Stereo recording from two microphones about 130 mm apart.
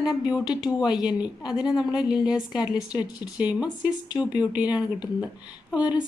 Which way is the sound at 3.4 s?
10° right (ahead or behind).